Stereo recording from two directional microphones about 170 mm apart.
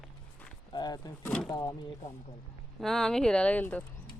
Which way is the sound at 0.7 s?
25° left (ahead or behind).